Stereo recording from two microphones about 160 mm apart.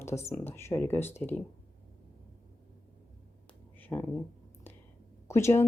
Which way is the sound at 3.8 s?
10° left (ahead or behind).